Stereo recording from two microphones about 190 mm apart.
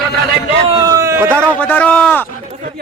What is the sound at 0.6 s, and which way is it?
Speech, 20° right (ahead or behind).